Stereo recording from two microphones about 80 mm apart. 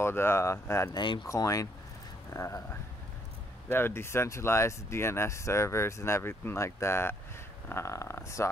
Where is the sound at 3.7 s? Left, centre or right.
Left.